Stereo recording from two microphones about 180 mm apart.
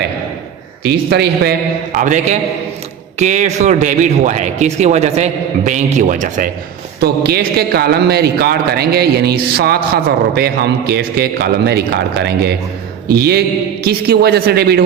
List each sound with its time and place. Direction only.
0.9 s a man's voice: 65° right (ahead or behind)
1.9 s a man's voice: 45° right (ahead or behind)
7.0 s a man's voice: 60° right (ahead or behind)